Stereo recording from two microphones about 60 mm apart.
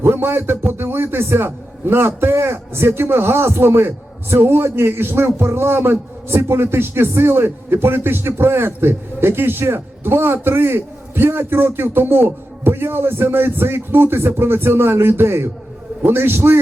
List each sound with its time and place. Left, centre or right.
0.0 s a man's voice: right